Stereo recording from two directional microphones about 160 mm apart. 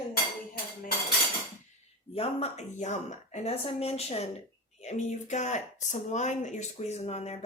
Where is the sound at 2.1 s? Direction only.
40° left (ahead or behind).